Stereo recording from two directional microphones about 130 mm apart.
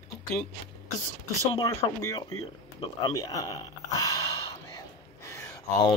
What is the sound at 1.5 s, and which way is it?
Speech, 25° left (ahead or behind).